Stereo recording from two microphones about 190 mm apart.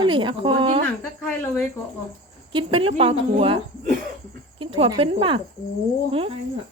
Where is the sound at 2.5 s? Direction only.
25° right (ahead or behind).